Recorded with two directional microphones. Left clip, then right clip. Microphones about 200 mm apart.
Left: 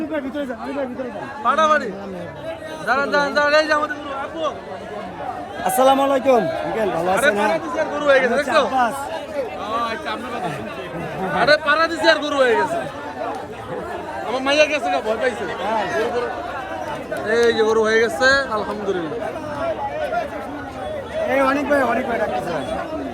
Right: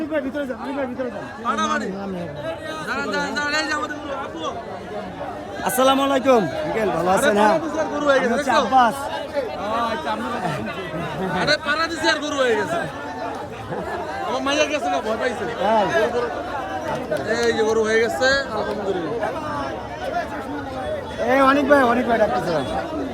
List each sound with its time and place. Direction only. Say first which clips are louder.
1.5 s speech: left 6 dB; 5° right (ahead or behind)
2.8 s speech: left 7 dB; 5° right (ahead or behind)
5.6 s speech: left 2 dB; 5° left (ahead or behind)
7.2 s speech: right 1 dB; 25° right (ahead or behind); by 8.9 s 10° right (ahead or behind)
11.3 s speech: left 5 dB; centre (ahead or behind)
14.3 s speech: left 4 dB; 10° right (ahead or behind)
17.2 s speech: left 5 dB; centre (ahead or behind)
21.2 s speech: right 3 dB; 50° right (ahead or behind)